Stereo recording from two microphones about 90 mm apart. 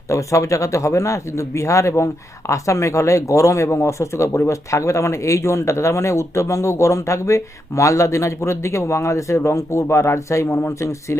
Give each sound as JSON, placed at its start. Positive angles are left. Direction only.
{"t": 0.1, "sound": "speech", "side_deg": 35}